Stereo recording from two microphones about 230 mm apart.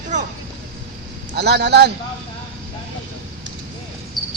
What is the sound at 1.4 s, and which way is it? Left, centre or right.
Speech, right.